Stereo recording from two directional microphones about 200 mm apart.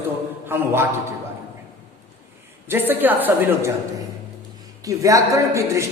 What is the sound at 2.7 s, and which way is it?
A man's voice, 10° right (ahead or behind).